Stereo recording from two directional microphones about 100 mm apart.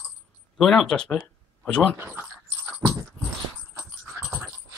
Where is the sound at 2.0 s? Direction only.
20° right (ahead or behind).